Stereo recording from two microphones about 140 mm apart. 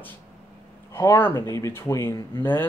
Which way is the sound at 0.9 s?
15° left (ahead or behind).